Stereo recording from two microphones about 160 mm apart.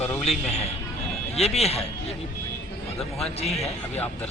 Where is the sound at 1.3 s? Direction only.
40° left (ahead or behind).